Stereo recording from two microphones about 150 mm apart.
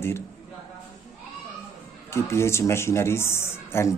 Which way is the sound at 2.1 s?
20° left (ahead or behind).